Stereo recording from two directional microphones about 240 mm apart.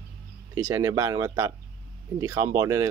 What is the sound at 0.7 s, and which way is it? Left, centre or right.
Speech, centre.